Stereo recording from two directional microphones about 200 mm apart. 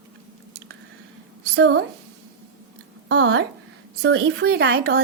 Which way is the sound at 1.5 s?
65° right (ahead or behind).